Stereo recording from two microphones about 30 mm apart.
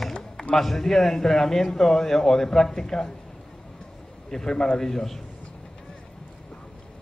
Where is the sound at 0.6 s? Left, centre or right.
Centre.